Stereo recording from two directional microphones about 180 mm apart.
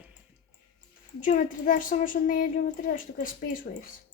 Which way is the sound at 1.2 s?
45° left (ahead or behind).